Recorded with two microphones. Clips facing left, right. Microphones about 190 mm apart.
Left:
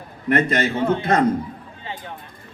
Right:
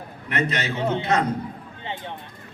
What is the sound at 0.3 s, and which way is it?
Speech, 50° left (ahead or behind).